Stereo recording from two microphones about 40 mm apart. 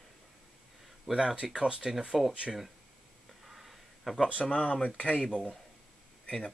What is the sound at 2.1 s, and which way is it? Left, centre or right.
Speech, centre.